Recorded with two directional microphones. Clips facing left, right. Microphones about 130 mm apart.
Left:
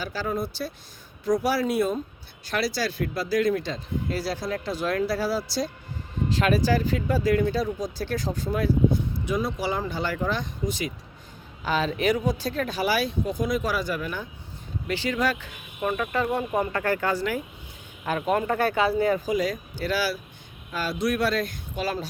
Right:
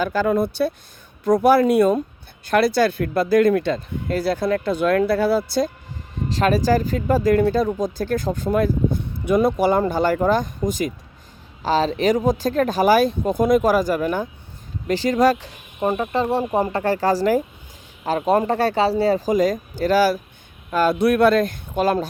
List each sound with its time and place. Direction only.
0.0 s speech: 55° right (ahead or behind)
6.3 s speech: 40° right (ahead or behind)
11.6 s speech: 35° right (ahead or behind)
20.7 s speech: 55° right (ahead or behind)